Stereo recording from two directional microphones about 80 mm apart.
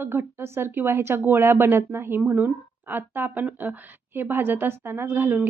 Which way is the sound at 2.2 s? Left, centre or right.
Centre.